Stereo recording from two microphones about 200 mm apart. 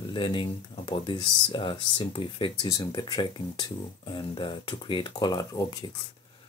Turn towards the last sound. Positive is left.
turn(degrees=20)  # may be behind; listen again after turning